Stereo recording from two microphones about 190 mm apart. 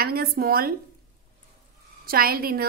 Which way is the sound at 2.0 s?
50° right (ahead or behind).